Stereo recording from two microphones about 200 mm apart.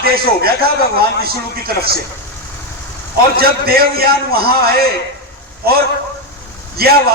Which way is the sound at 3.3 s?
50° right (ahead or behind).